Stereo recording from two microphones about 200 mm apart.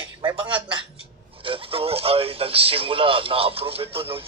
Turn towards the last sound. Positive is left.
turn(degrees=-30)  # may be behind; listen again after turning